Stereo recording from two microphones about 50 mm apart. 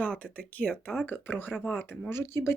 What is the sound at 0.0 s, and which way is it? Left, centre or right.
Speech, left.